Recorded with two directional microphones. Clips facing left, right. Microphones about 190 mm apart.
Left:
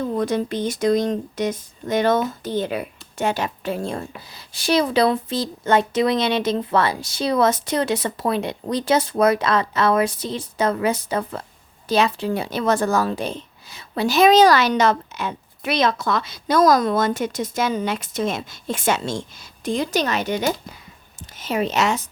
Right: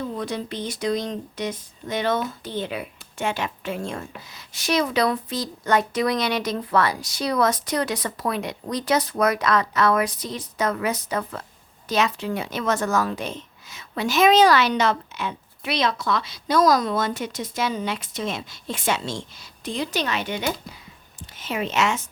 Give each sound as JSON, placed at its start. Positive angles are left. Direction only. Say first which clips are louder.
{"t": 0.0, "sound": "a woman's voice", "louder": "left 6 dB", "side_deg": 45}